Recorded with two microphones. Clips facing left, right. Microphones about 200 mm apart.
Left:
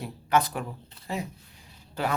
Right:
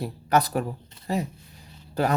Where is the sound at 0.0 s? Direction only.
40° right (ahead or behind).